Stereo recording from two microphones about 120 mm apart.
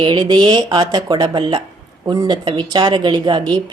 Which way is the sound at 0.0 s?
40° right (ahead or behind).